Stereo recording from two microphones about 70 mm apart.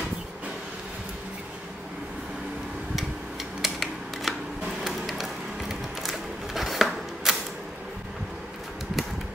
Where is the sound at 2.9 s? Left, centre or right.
Centre.